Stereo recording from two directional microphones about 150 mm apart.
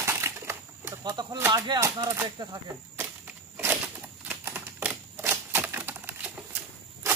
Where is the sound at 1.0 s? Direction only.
30° right (ahead or behind).